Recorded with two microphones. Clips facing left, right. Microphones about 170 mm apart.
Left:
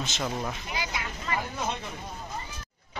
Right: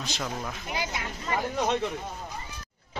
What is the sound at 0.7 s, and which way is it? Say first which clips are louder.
Speech: right 2 dB; 50° right (ahead or behind).